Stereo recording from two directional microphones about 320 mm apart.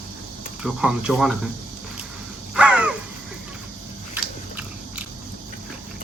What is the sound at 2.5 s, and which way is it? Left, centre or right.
Crow, centre.